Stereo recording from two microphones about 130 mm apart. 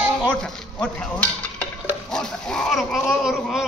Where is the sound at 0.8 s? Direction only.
10° left (ahead or behind).